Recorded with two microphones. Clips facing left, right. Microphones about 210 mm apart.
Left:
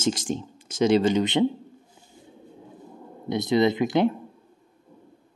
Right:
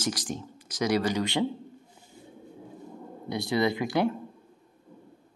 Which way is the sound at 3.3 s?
20° left (ahead or behind).